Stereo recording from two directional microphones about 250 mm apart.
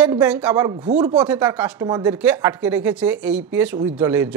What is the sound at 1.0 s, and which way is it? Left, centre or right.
A woman's voice, centre.